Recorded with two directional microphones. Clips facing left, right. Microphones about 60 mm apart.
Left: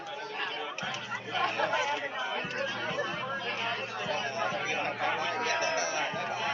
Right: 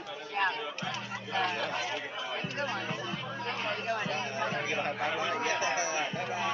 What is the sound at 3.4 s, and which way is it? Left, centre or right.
Chatter, right.